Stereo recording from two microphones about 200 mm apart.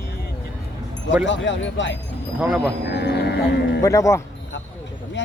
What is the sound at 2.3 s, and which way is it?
Speech, 5° right (ahead or behind).